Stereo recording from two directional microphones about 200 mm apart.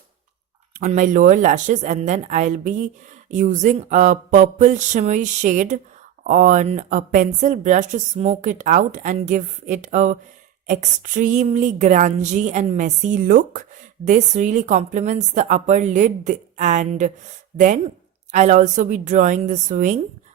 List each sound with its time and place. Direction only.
0.8 s a woman's voice: 40° right (ahead or behind)